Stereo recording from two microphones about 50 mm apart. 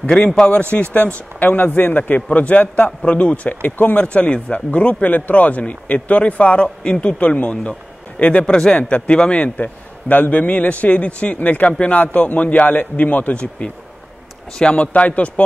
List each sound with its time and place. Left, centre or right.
0.0 s a man's voice: left